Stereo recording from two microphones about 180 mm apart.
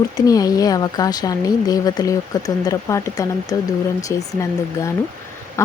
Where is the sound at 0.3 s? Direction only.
20° left (ahead or behind).